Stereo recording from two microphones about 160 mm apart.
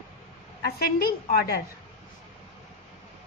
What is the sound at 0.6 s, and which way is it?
A woman's voice, 75° left (ahead or behind).